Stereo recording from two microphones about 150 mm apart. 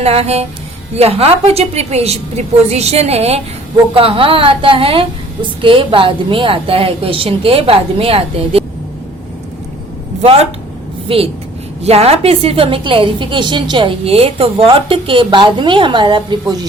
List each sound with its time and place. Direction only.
0.0 s a woman's voice: 45° right (ahead or behind)
10.2 s a woman's voice: 45° right (ahead or behind); by 16.6 s 30° right (ahead or behind)